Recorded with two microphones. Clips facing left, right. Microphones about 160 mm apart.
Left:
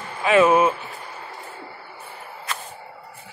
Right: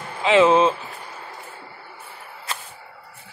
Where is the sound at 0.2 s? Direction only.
20° right (ahead or behind).